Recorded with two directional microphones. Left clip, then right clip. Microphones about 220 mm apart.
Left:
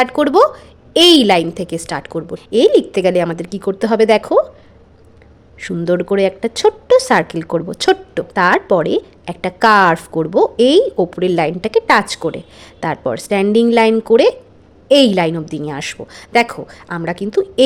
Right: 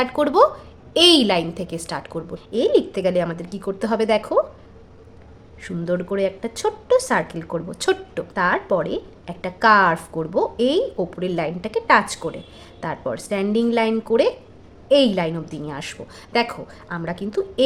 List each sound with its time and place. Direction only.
0.0 s speech: 35° left (ahead or behind)
5.5 s speech: 35° left (ahead or behind)